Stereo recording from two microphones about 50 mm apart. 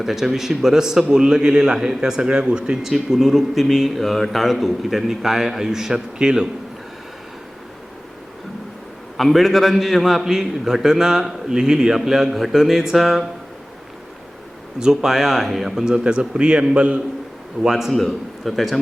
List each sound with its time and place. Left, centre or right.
0.0 s a man's voice: centre
2.8 s speech: centre
9.1 s a man's voice: centre
14.8 s a man's voice: centre
15.8 s a man's voice: centre
17.6 s a man's voice: centre
17.9 s speech: centre